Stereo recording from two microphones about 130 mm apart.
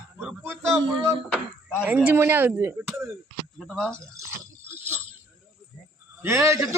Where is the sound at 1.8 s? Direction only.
10° right (ahead or behind).